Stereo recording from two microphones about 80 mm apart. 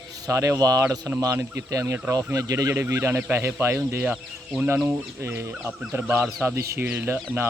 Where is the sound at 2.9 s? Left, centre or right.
Right.